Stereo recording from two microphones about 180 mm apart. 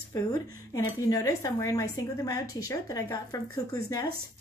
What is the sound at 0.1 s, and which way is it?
Speech, 20° left (ahead or behind).